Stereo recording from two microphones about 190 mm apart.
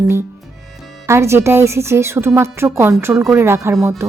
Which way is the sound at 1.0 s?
15° right (ahead or behind).